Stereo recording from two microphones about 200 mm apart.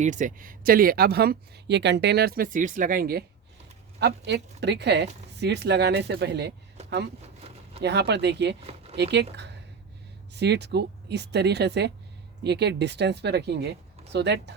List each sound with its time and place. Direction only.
0.0 s speech: 40° right (ahead or behind); by 6.5 s 55° right (ahead or behind)
7.8 s speech: 60° right (ahead or behind)